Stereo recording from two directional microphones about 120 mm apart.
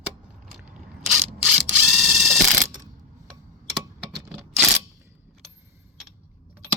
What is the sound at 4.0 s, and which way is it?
Scissors, centre (ahead or behind).